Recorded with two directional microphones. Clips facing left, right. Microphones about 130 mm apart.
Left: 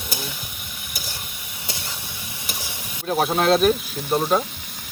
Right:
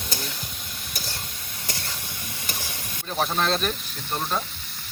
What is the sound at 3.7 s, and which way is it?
Speech, 10° left (ahead or behind).